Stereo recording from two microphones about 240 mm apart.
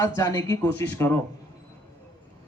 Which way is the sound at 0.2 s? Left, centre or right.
Centre.